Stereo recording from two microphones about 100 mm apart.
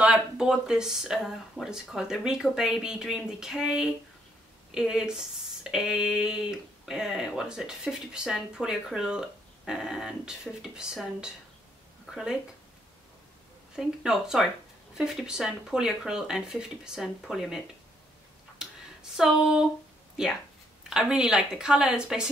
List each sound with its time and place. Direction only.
0.0 s speech: 5° right (ahead or behind)
13.7 s speech: 5° right (ahead or behind)
19.1 s speech: 5° right (ahead or behind)